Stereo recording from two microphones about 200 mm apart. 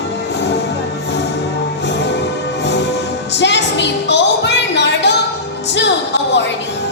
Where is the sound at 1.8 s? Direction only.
60° left (ahead or behind).